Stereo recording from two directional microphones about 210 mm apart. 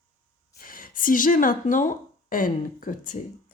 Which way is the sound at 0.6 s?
40° left (ahead or behind).